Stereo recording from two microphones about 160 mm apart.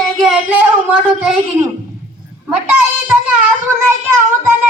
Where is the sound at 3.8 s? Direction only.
15° right (ahead or behind).